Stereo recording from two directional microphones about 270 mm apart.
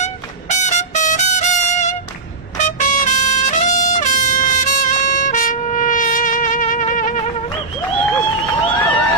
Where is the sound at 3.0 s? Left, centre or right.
Left.